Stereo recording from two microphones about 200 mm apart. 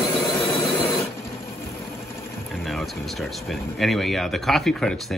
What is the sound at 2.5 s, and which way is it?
Speech, centre (ahead or behind).